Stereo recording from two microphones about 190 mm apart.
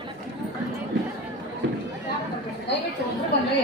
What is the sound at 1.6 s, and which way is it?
Run, 75° right (ahead or behind).